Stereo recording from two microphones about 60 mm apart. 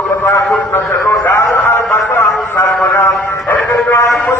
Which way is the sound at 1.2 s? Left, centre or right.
Left.